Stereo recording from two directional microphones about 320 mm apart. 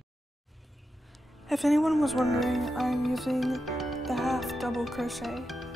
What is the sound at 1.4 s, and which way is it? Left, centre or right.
Music, centre.